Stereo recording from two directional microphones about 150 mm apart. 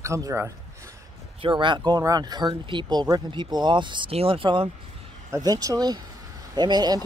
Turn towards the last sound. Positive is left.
turn(degrees=-30)  # may be behind; listen again after turning